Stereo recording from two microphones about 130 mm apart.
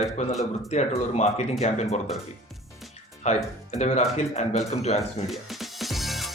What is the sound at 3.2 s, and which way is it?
Speech, 60° left (ahead or behind).